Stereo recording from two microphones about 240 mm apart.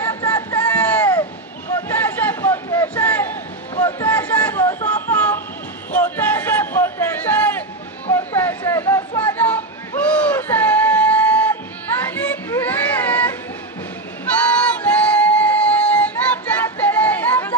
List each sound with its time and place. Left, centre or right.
0.0 s a sound: centre
12.1 s child singing: centre
14.6 s music: centre